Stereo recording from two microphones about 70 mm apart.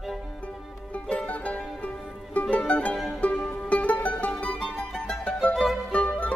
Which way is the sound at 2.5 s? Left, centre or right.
Centre.